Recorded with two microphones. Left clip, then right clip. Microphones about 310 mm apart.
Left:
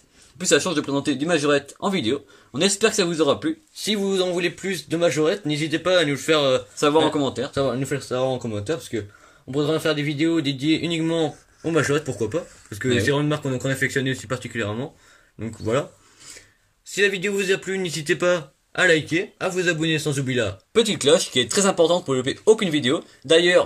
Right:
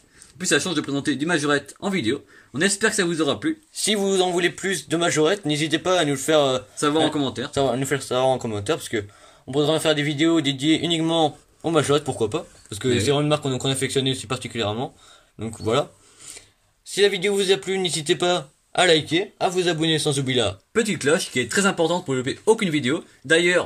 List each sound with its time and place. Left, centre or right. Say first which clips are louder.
0.4 s speech: left 2 dB; centre
3.7 s speech: right 3 dB; right
6.8 s speech: left 1 dB; centre
7.5 s a man's voice: right 6 dB; right
16.8 s a man's voice: right 1 dB; centre
20.7 s speech: left 4 dB; centre